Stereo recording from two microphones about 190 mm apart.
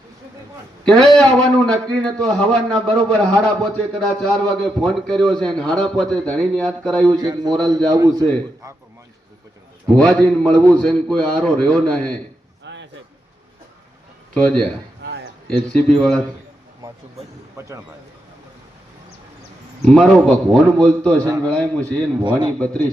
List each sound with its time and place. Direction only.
0.9 s a man's voice: 5° left (ahead or behind)
7.2 s a man's voice: 20° right (ahead or behind)
9.9 s a man's voice: 5° left (ahead or behind)
12.6 s a sound: 70° right (ahead or behind)
14.3 s a man's voice: 5° left (ahead or behind)
15.7 s a man's voice: 5° left (ahead or behind)
17.6 s speech: 15° right (ahead or behind)
19.8 s a man's voice: 5° left (ahead or behind)